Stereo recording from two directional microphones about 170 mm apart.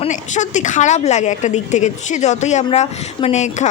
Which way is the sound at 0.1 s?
45° left (ahead or behind).